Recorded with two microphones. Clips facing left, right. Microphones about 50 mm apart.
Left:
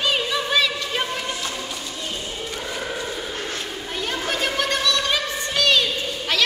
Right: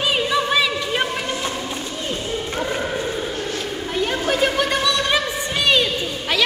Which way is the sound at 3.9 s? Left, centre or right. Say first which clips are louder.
Right 5 dB; centre.